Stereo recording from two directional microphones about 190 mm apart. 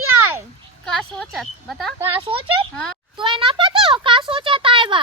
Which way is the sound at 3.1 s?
25° right (ahead or behind).